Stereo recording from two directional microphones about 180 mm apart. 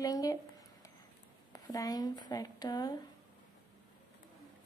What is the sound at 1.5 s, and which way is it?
Speech, 20° left (ahead or behind).